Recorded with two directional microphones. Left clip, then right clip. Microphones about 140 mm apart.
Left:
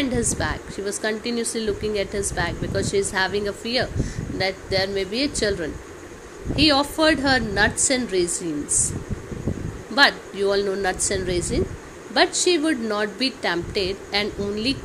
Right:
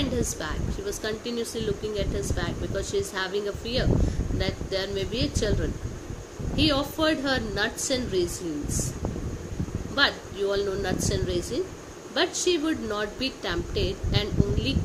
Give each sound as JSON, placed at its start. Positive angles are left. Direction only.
{"t": 0.1, "sound": "speech", "side_deg": 35}
{"t": 9.9, "sound": "speech", "side_deg": 35}